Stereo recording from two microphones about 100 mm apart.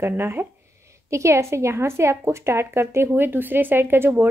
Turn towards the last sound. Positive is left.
turn(degrees=-20)  # may be behind; listen again after turning